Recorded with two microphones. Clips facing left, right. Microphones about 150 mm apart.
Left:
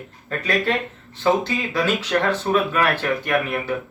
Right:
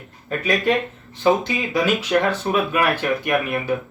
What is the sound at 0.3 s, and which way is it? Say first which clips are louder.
Speech: right 2 dB; 15° right (ahead or behind).